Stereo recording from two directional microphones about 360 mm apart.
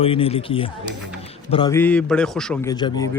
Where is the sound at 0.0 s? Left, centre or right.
Centre.